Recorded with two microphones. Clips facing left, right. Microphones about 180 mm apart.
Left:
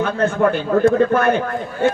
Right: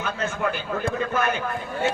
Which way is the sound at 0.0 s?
60° left (ahead or behind).